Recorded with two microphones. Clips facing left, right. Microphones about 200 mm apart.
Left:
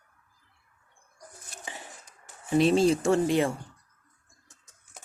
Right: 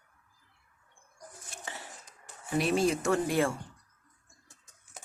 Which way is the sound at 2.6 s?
25° left (ahead or behind).